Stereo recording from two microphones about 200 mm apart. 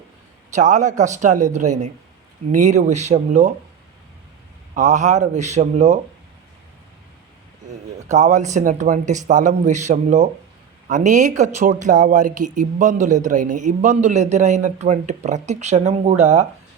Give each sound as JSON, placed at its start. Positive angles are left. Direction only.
{"t": 0.5, "sound": "speech", "side_deg": -40}
{"t": 4.7, "sound": "speech", "side_deg": -35}
{"t": 8.1, "sound": "speech", "side_deg": -35}